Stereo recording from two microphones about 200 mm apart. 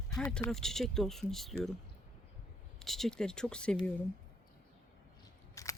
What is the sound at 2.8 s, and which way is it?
Speech, centre (ahead or behind).